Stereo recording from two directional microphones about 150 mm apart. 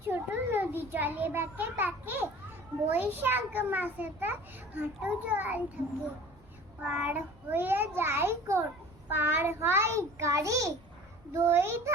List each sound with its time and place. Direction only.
0.1 s a child's voice: 15° right (ahead or behind)
6.8 s a child's voice: 10° right (ahead or behind)